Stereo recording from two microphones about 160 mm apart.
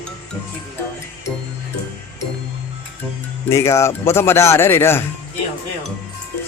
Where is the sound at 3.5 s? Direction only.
15° left (ahead or behind).